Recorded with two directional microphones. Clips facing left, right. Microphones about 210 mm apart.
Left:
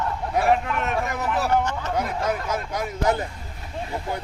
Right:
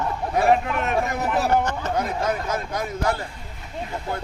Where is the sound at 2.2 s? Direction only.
10° left (ahead or behind).